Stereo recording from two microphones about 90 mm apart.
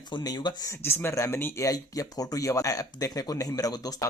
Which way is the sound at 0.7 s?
25° left (ahead or behind).